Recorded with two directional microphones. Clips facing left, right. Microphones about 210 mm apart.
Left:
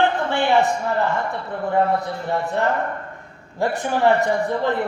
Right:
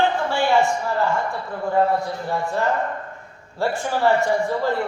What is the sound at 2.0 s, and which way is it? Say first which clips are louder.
A man's voice: left 1 dB; 20° left (ahead or behind).